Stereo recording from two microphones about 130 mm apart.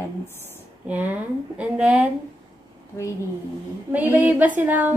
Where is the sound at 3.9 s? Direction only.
15° right (ahead or behind).